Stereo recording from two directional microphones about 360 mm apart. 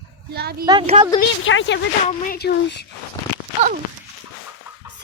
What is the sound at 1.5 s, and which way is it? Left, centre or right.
A woman's voice, left.